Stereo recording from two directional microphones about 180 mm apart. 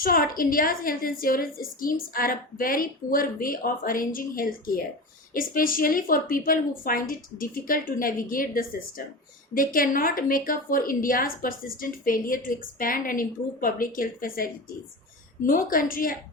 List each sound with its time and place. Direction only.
0.0 s a woman's voice: 55° left (ahead or behind)